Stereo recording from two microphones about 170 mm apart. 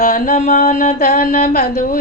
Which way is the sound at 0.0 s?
45° left (ahead or behind).